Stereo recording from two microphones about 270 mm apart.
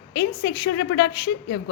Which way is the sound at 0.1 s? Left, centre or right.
Left.